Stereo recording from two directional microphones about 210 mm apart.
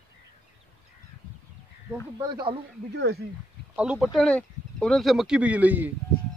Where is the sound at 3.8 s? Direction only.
5° right (ahead or behind).